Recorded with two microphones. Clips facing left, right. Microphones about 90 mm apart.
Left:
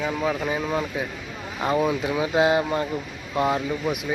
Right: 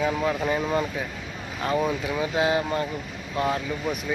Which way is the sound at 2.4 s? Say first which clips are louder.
Left 4 dB; 25° left (ahead or behind).